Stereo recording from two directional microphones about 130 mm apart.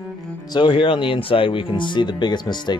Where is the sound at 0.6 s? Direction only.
40° left (ahead or behind).